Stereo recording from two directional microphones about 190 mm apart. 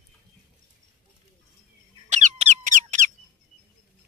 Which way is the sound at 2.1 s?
40° right (ahead or behind).